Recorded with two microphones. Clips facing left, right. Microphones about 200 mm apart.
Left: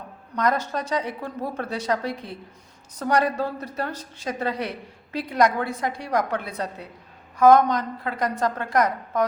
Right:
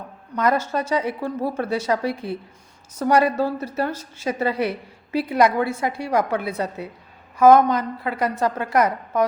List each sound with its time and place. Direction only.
0.3 s a woman's voice: 5° right (ahead or behind)